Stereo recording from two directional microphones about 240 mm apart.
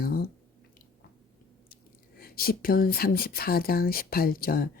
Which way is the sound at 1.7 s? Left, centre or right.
Left.